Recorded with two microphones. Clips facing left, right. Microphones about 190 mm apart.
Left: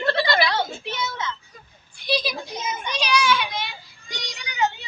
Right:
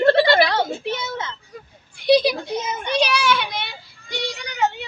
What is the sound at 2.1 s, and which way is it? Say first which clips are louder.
A child's voice: right 10 dB; 60° right (ahead or behind).